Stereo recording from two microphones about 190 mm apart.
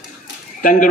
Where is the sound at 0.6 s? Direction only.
45° left (ahead or behind).